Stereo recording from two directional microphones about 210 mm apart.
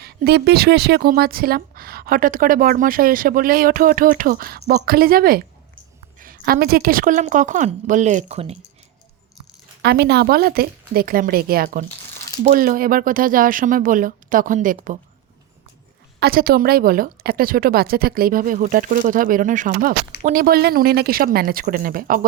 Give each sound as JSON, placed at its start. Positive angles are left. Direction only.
{"t": 0.0, "sound": "speech", "side_deg": -50}
{"t": 9.8, "sound": "speech", "side_deg": -50}
{"t": 16.2, "sound": "speech", "side_deg": -45}